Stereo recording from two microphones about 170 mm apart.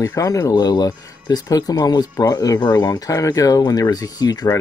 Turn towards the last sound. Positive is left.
turn(degrees=20)  # may be behind; listen again after turning